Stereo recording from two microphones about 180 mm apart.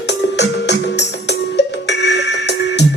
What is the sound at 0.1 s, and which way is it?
Music, 75° left (ahead or behind).